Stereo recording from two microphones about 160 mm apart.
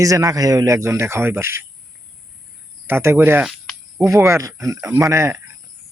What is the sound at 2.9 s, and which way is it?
A man's voice, 15° right (ahead or behind).